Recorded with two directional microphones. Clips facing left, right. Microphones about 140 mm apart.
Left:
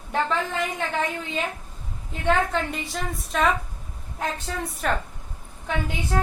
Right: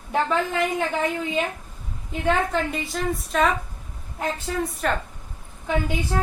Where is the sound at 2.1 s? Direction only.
Centre (ahead or behind).